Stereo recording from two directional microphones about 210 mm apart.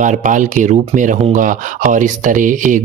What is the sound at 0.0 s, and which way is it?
Speech, 35° right (ahead or behind).